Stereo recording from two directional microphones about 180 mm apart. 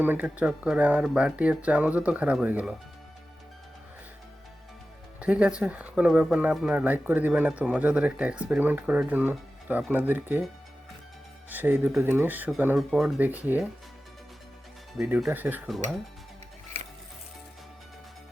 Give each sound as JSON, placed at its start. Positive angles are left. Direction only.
{"t": 0.0, "sound": "speech", "side_deg": -10}
{"t": 5.2, "sound": "speech", "side_deg": -5}
{"t": 11.4, "sound": "speech", "side_deg": -10}
{"t": 14.9, "sound": "speech", "side_deg": -5}